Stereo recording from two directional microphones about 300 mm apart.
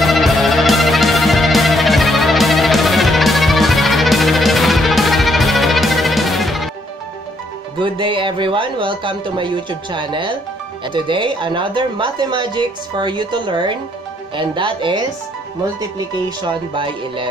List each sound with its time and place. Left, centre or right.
0.0 s music: centre
7.8 s speech: centre